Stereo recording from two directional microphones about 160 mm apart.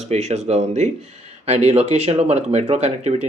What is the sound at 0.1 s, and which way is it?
Speech, 45° right (ahead or behind).